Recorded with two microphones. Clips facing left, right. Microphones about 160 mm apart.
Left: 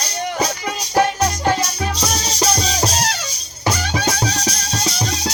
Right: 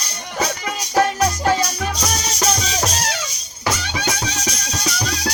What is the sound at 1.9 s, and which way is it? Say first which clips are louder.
Music: left 1 dB; 30° left (ahead or behind).